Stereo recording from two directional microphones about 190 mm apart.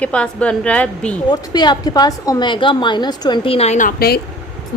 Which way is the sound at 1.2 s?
20° left (ahead or behind).